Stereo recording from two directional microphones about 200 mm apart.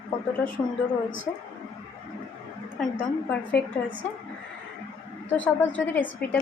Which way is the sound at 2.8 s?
5° left (ahead or behind).